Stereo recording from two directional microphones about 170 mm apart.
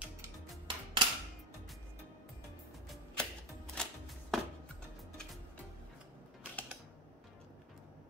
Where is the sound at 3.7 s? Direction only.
Centre (ahead or behind).